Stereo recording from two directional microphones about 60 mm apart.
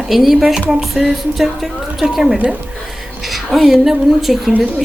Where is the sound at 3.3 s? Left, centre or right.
Centre.